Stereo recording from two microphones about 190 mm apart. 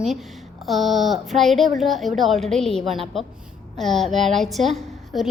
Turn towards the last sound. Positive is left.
turn(degrees=0)  # may be behind; listen again after turning